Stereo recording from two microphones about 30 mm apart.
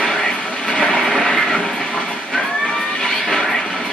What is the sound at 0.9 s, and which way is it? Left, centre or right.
Train, centre.